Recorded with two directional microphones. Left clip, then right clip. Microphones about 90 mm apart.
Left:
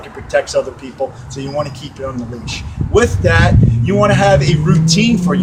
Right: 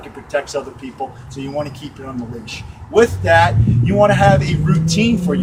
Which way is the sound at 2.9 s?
15° left (ahead or behind).